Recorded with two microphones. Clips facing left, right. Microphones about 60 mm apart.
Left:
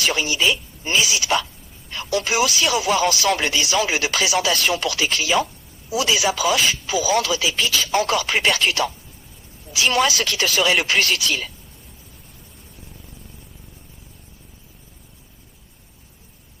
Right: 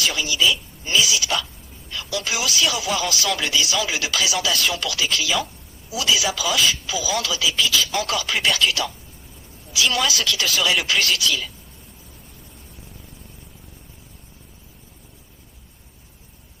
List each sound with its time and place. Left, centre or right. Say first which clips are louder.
0.0 s speech: left 1 dB; left
10.0 s speech: left 3 dB; left